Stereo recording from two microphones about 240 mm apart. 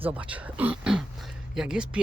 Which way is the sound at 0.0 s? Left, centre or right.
Centre.